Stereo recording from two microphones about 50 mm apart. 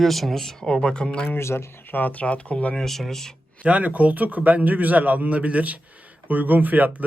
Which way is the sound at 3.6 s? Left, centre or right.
Right.